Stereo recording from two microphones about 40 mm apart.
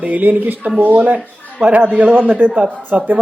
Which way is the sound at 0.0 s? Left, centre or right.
Right.